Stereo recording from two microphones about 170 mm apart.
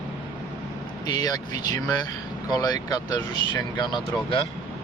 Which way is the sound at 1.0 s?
20° left (ahead or behind).